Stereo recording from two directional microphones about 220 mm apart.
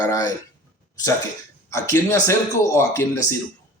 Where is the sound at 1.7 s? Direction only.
10° left (ahead or behind).